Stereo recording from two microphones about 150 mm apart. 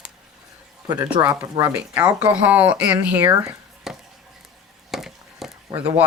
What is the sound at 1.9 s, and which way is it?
Speech, 10° right (ahead or behind).